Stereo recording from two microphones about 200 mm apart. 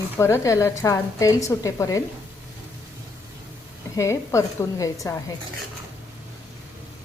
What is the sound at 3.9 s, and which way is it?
A woman's voice, 15° left (ahead or behind).